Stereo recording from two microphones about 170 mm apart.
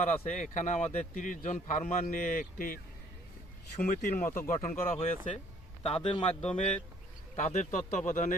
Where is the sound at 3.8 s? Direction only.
55° left (ahead or behind).